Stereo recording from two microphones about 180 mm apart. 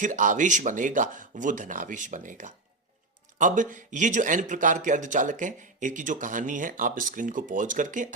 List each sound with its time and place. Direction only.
0.0 s a man's voice: 45° right (ahead or behind)